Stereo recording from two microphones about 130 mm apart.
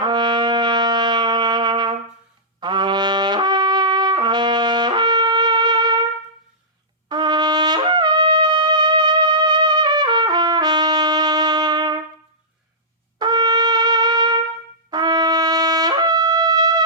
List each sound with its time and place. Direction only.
0.0 s brass instrument: 35° right (ahead or behind)
2.6 s trumpet: 35° right (ahead or behind)
7.1 s wind instrument: 35° right (ahead or behind)
13.1 s brass instrument: 35° right (ahead or behind)
14.8 s wind instrument: 35° right (ahead or behind)